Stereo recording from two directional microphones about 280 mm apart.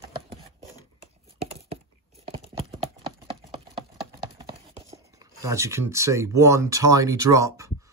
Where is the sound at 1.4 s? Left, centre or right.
Right.